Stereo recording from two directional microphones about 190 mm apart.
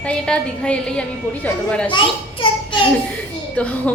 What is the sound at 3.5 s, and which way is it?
Speech, 5° left (ahead or behind).